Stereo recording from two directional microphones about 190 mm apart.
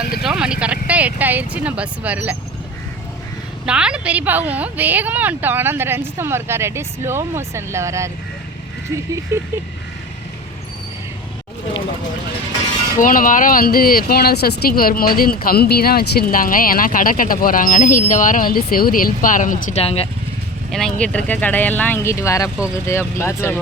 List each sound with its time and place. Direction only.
0.2 s a woman's voice: 5° right (ahead or behind)
3.7 s a woman's voice: 5° right (ahead or behind)
9.3 s a woman's voice: 15° right (ahead or behind)
13.0 s speech: 45° left (ahead or behind)
19.8 s speech: 30° left (ahead or behind)
20.7 s speech: centre (ahead or behind)